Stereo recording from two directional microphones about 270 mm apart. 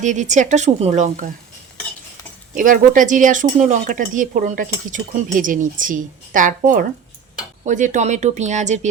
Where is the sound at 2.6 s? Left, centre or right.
Right.